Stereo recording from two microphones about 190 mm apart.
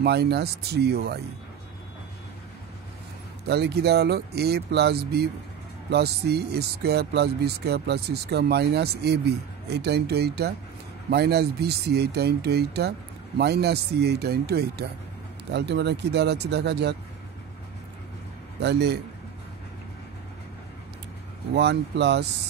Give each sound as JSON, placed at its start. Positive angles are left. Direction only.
{"t": 0.0, "sound": "speech", "side_deg": -60}
{"t": 3.4, "sound": "speech", "side_deg": -60}
{"t": 18.6, "sound": "speech", "side_deg": -60}
{"t": 21.5, "sound": "speech", "side_deg": -65}